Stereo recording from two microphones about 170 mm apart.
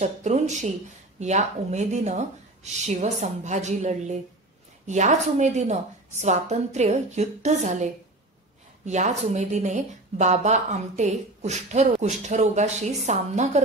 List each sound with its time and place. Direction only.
0.0 s a woman's voice: 45° right (ahead or behind)